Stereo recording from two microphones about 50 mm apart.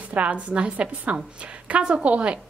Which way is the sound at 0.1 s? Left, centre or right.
Right.